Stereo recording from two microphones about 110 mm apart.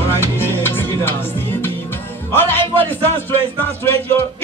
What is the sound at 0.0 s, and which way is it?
Music, 20° left (ahead or behind).